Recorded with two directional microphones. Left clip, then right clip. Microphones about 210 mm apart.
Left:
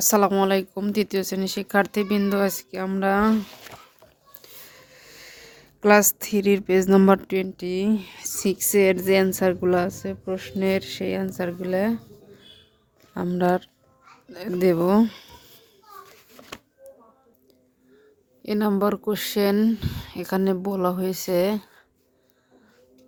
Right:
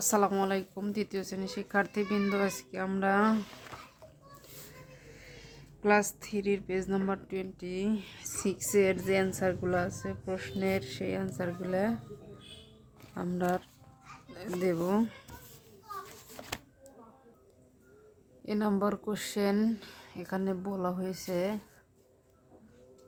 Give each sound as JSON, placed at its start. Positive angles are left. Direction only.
{"t": 0.0, "sound": "speech", "side_deg": 40}
{"t": 4.9, "sound": "speech", "side_deg": 50}
{"t": 13.1, "sound": "speech", "side_deg": 40}
{"t": 18.4, "sound": "speech", "side_deg": 40}